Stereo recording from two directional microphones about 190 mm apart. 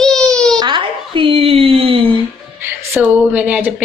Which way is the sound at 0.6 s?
25° right (ahead or behind).